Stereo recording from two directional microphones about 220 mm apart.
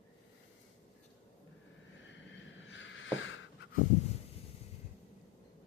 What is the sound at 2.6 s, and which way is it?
Vehicle, 60° left (ahead or behind).